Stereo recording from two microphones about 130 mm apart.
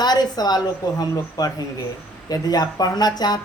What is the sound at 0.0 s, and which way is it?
A woman's voice, 30° left (ahead or behind).